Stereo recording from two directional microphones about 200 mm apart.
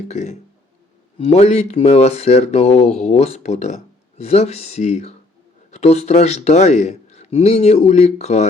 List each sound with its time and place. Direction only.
0.1 s speech: 35° left (ahead or behind)